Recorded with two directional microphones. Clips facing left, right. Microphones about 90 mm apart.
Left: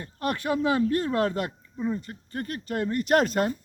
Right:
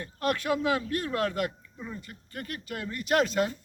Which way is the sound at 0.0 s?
25° left (ahead or behind).